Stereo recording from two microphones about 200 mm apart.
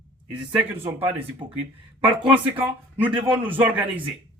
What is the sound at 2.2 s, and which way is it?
A man's voice, 10° right (ahead or behind).